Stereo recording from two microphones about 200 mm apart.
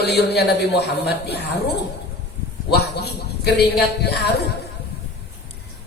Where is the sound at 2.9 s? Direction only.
55° left (ahead or behind).